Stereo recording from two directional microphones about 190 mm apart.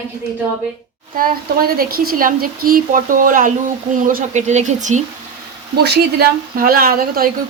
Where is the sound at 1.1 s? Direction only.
50° right (ahead or behind).